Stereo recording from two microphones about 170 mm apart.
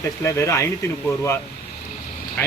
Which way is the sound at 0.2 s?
15° left (ahead or behind).